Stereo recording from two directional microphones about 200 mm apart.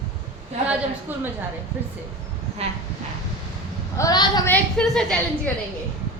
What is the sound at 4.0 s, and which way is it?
Speech, 20° left (ahead or behind).